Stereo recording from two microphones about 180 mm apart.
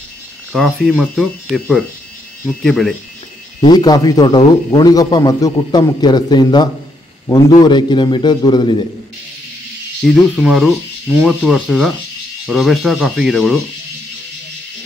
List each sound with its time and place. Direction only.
0.5 s speech: centre (ahead or behind)
3.6 s a man's voice: 20° left (ahead or behind)
10.3 s speech: centre (ahead or behind)